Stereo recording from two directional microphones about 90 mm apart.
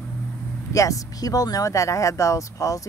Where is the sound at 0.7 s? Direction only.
35° left (ahead or behind).